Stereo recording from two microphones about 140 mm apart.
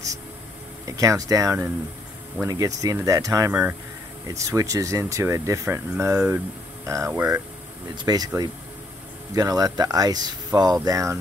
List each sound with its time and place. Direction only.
0.8 s speech: 25° right (ahead or behind)
7.9 s speech: 30° right (ahead or behind)
9.3 s speech: 25° right (ahead or behind)